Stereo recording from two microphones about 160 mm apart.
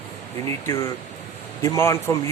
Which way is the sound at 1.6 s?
15° left (ahead or behind).